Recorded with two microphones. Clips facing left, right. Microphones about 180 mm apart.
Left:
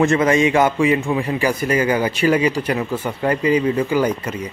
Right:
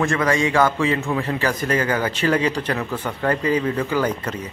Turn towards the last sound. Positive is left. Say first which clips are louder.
# left 3 dB
turn(degrees=10)  # may be behind; listen again after turning